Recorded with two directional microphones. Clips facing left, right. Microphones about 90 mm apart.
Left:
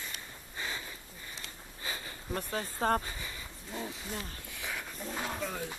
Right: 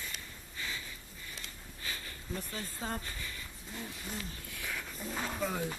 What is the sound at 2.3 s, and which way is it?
Speech, 55° left (ahead or behind).